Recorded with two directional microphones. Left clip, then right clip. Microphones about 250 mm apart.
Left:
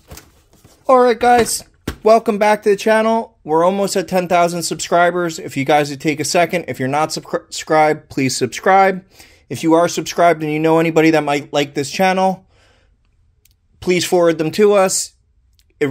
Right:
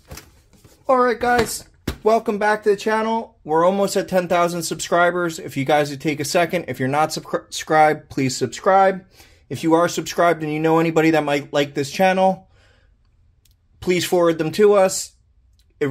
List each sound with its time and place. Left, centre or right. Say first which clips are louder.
0.8 s speech: left 6 dB; left
13.7 s speech: left 4 dB; left